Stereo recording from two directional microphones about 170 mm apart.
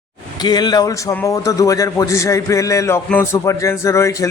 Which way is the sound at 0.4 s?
25° left (ahead or behind).